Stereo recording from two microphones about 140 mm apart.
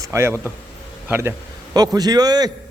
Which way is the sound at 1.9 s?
25° right (ahead or behind).